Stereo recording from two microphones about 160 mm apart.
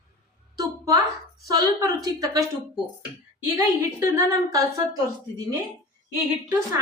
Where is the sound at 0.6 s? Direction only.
20° right (ahead or behind).